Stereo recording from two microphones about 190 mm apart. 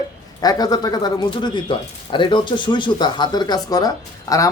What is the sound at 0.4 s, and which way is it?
Speech, 20° left (ahead or behind).